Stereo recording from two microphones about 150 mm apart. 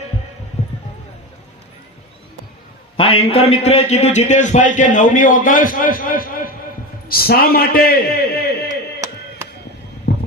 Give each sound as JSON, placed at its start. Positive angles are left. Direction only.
{"t": 3.0, "sound": "a man's voice", "side_deg": 40}
{"t": 7.1, "sound": "a man's voice", "side_deg": 90}
{"t": 9.0, "sound": "chop", "side_deg": -20}
{"t": 10.1, "sound": "heart sounds", "side_deg": 90}